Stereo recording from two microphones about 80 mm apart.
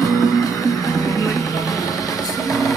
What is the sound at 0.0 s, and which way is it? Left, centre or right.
Music, left.